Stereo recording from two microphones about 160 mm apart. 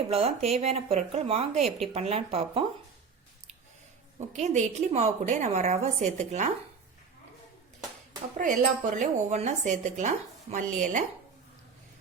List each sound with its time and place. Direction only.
0.1 s speech: 40° right (ahead or behind)
4.3 s speech: 50° right (ahead or behind)
8.4 s speech: 55° right (ahead or behind)